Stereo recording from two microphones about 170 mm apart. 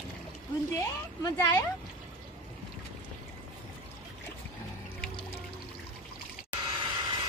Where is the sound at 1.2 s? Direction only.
20° left (ahead or behind).